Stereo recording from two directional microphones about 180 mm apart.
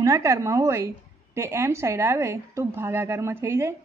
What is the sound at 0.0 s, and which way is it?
A woman's voice, 15° right (ahead or behind).